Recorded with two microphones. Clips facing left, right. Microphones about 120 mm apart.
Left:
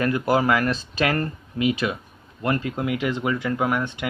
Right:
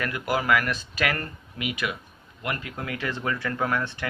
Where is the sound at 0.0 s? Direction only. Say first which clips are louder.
Left 7 dB; 30° left (ahead or behind).